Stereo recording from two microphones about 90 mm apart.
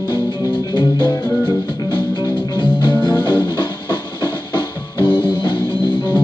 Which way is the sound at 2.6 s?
55° left (ahead or behind).